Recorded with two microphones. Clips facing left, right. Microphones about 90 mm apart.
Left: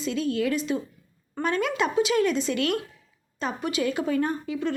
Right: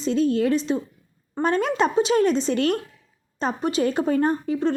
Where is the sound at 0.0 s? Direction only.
35° right (ahead or behind).